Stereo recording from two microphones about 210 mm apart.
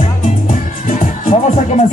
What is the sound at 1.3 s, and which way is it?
Speech, 35° left (ahead or behind).